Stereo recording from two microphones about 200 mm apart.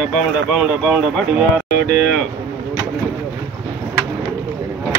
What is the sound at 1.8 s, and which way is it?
Speech, 60° right (ahead or behind).